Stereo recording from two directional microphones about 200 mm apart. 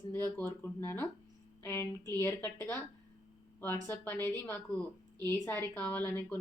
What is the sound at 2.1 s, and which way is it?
Speech, 15° left (ahead or behind).